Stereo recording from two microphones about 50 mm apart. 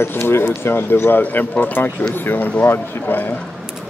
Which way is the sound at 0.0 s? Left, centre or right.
Left.